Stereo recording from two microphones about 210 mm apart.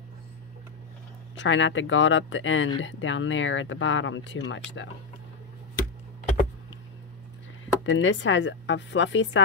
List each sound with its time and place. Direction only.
1.3 s speech: 65° left (ahead or behind)
7.8 s speech: 65° left (ahead or behind)